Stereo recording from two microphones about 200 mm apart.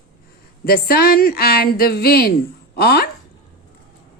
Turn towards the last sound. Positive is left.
turn(degrees=50)  # may be behind; listen again after turning